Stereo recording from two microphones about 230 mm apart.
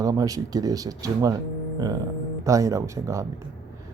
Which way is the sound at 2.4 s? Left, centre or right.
Centre.